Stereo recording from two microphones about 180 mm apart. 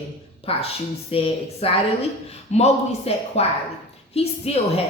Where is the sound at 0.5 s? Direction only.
30° left (ahead or behind).